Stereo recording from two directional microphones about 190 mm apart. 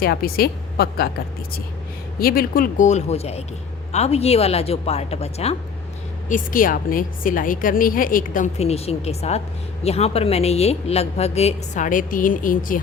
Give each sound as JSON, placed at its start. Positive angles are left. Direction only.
{"t": 0.0, "sound": "a woman's voice", "side_deg": 55}
{"t": 2.1, "sound": "a woman's voice", "side_deg": 50}
{"t": 6.2, "sound": "a woman's voice", "side_deg": 45}